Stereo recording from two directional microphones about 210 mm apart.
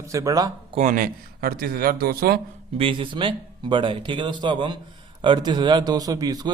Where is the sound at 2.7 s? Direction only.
25° right (ahead or behind).